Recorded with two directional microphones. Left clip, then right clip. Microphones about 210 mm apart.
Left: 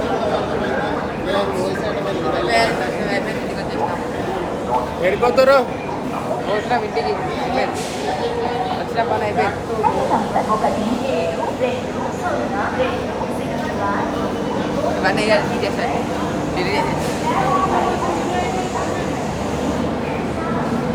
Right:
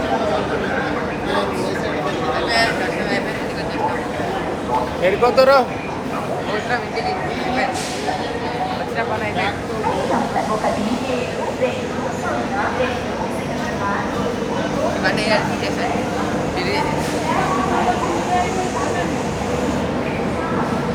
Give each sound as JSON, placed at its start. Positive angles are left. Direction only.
{"t": 5.0, "sound": "speech", "side_deg": 0}
{"t": 15.0, "sound": "speech", "side_deg": 30}